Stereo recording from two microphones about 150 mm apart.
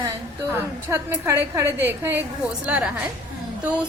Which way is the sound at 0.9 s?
20° right (ahead or behind).